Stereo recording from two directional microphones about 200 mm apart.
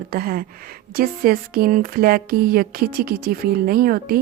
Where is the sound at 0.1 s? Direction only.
45° right (ahead or behind).